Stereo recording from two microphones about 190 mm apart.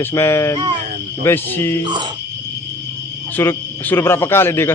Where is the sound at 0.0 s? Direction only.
15° left (ahead or behind).